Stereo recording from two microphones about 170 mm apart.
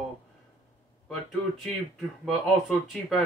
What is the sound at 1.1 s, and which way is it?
Speech, centre (ahead or behind).